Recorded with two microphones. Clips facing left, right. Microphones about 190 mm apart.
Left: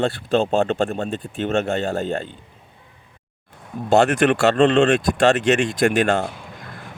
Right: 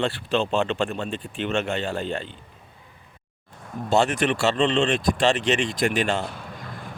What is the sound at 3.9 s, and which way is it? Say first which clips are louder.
Speech: left 5 dB; 55° left (ahead or behind).